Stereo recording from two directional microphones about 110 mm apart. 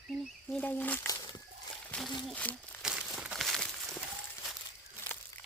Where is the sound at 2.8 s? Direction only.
5° right (ahead or behind).